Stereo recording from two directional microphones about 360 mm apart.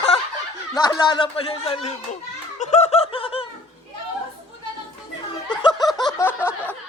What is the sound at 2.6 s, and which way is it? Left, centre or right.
Snicker, centre.